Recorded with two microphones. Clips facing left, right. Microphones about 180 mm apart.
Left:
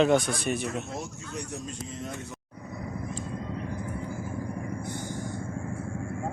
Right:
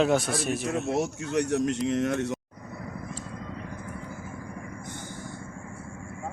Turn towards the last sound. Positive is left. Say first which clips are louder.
# left 5 dB
turn(degrees=15)  # may be behind; listen again after turning